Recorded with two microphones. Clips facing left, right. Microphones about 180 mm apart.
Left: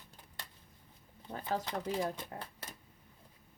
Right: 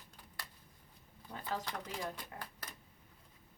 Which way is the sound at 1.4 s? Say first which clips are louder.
Left 5 dB; 20° left (ahead or behind).